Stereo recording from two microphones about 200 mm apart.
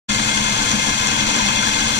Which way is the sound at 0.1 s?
60° left (ahead or behind).